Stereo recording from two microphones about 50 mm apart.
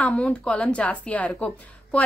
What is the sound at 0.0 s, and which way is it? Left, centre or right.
A woman's voice, left.